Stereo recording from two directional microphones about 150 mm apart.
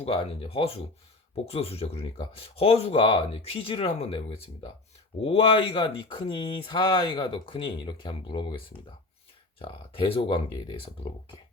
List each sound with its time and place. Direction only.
0.0 s speech: 40° left (ahead or behind)